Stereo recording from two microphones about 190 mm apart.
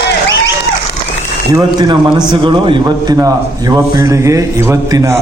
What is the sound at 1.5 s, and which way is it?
A man's voice, 25° right (ahead or behind).